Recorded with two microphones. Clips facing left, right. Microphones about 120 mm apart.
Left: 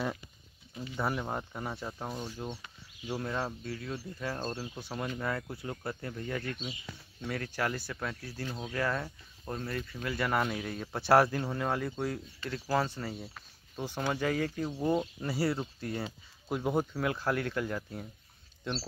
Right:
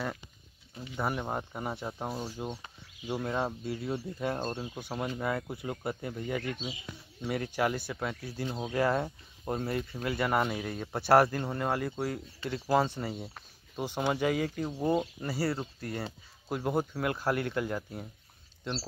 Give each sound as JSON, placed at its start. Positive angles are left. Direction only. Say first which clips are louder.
{"t": 0.8, "sound": "speech", "louder": "right 1 dB", "side_deg": -10}
{"t": 8.5, "sound": "speech", "louder": "right 5 dB", "side_deg": -25}